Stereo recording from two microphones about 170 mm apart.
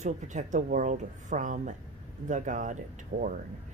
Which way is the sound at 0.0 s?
45° right (ahead or behind).